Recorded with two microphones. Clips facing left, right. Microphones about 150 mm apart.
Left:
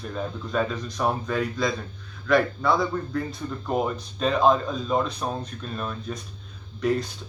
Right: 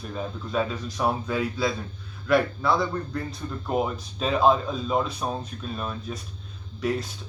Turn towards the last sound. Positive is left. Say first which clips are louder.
# left 3 dB
turn(degrees=0)  # may be behind; listen again after turning